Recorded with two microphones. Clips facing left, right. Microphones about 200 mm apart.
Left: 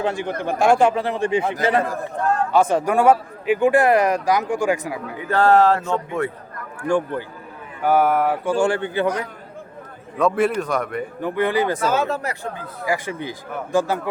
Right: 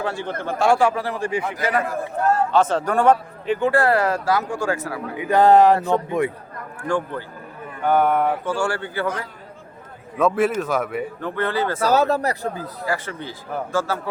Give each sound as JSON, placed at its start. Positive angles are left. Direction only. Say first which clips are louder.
{"t": 0.0, "sound": "a man's voice", "louder": "left 3 dB", "side_deg": 15}
{"t": 2.1, "sound": "speech", "louder": "right 2 dB", "side_deg": -5}
{"t": 2.5, "sound": "speech", "louder": "left 1 dB", "side_deg": 10}
{"t": 5.1, "sound": "speech", "louder": "right 2 dB", "side_deg": -15}
{"t": 6.8, "sound": "speech", "louder": "left 3 dB", "side_deg": 15}
{"t": 8.4, "sound": "a man's voice", "louder": "left 4 dB", "side_deg": 20}
{"t": 10.2, "sound": "speech", "louder": "even", "side_deg": 0}
{"t": 11.2, "sound": "speech", "louder": "left 5 dB", "side_deg": 15}
{"t": 11.8, "sound": "speech", "louder": "right 3 dB", "side_deg": -35}
{"t": 12.8, "sound": "speech", "louder": "left 3 dB", "side_deg": 15}